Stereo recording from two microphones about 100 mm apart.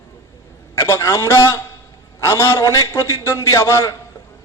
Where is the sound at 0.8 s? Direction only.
30° left (ahead or behind).